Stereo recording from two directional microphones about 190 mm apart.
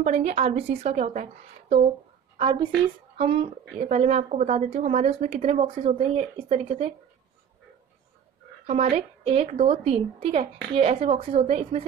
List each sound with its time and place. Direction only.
0.0 s speech: 35° right (ahead or behind)
2.3 s a woman's voice: 25° right (ahead or behind)
8.9 s speech: 30° right (ahead or behind)